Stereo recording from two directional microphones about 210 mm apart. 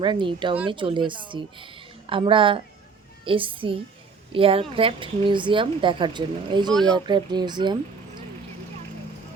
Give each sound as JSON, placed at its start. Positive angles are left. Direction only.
{"t": 0.0, "sound": "a woman's voice", "side_deg": -25}